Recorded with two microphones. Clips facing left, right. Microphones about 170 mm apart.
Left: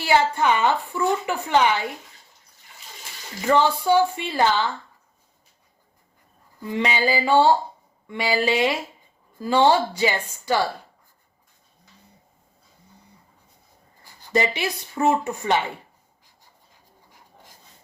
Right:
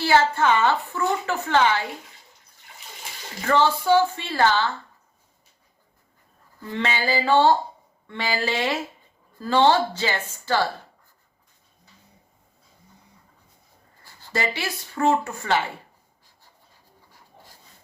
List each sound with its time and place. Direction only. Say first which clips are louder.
0.0 s a woman's voice: even; 15° left (ahead or behind)
3.4 s a woman's voice: left 1 dB; 15° left (ahead or behind)
6.6 s a woman's voice: left 3 dB; 15° left (ahead or behind)
14.0 s speech: left 4 dB; 15° left (ahead or behind)